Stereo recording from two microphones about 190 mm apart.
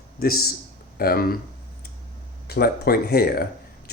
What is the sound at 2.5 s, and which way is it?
Speech, 55° left (ahead or behind).